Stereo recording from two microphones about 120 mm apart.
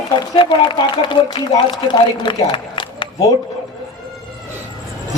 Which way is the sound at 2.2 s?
40° left (ahead or behind).